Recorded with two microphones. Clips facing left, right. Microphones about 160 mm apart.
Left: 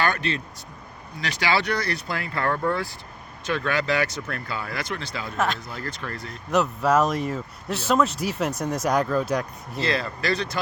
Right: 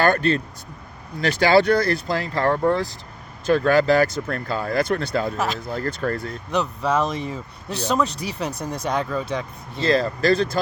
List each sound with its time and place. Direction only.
0.0 s speech: 50° right (ahead or behind)
2.1 s speech: 35° right (ahead or behind)
6.5 s speech: 5° left (ahead or behind)
9.8 s speech: 45° right (ahead or behind)